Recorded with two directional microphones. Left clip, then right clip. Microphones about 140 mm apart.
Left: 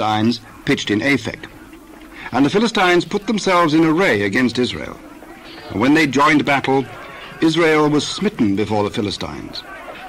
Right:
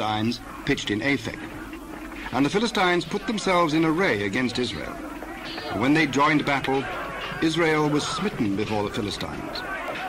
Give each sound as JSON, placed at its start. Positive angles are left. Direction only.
{"t": 0.0, "sound": "speech", "side_deg": 30}
{"t": 2.3, "sound": "a man's voice", "side_deg": 30}